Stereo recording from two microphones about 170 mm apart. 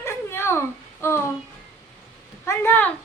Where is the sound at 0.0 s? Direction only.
15° left (ahead or behind).